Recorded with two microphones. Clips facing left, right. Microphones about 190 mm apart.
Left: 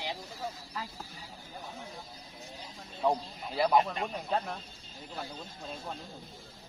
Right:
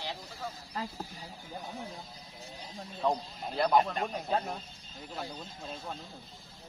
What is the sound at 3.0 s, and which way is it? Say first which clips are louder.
Speech: left 1 dB; 5° left (ahead or behind).